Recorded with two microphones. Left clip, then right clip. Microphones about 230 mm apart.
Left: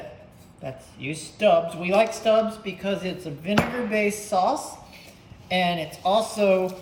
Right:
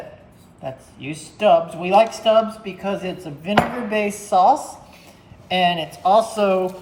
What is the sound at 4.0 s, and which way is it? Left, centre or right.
Speech, centre.